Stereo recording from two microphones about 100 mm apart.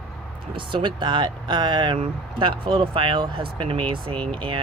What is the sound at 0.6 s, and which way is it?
Speech, 55° right (ahead or behind).